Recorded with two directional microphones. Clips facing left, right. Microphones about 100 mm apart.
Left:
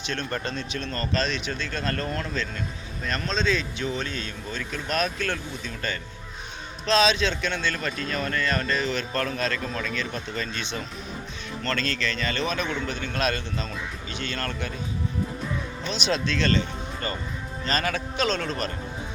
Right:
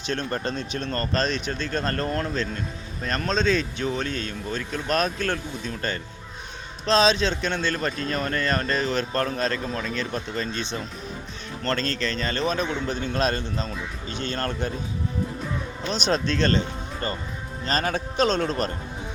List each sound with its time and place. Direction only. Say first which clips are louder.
0.1 s speech: right 3 dB; 35° right (ahead or behind)
9.2 s speech: right 2 dB; 20° right (ahead or behind); by 14.7 s 40° right (ahead or behind)
15.9 s speech: right 3 dB; 45° right (ahead or behind)